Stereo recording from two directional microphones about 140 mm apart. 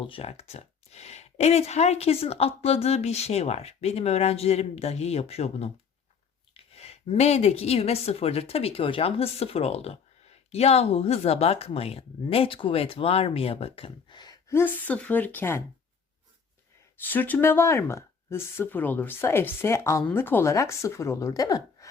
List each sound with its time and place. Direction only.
0.0 s a woman's voice: 40° left (ahead or behind)
14.5 s speech: 15° left (ahead or behind)
17.0 s speech: 10° left (ahead or behind)